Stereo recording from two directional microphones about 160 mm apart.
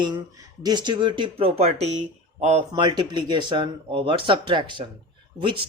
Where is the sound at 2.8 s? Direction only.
30° right (ahead or behind).